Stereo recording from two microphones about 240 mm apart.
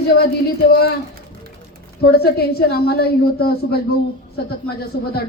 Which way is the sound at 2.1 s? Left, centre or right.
Left.